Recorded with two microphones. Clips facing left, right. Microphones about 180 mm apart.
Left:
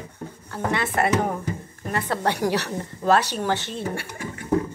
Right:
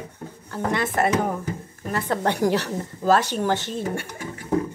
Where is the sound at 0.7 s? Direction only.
45° right (ahead or behind).